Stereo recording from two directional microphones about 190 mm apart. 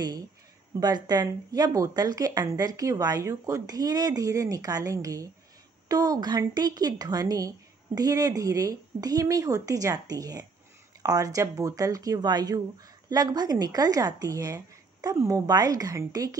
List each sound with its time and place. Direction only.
0.7 s speech: 20° right (ahead or behind)